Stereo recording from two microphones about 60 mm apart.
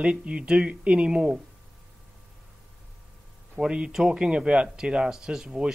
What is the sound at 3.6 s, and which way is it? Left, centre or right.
Speech, centre.